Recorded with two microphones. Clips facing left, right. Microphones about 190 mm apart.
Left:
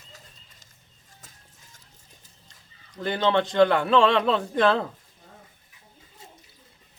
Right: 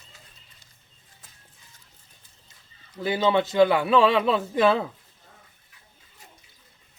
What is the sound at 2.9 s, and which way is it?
A man's voice, 5° right (ahead or behind).